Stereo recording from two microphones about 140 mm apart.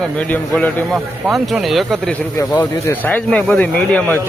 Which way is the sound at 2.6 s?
15° left (ahead or behind).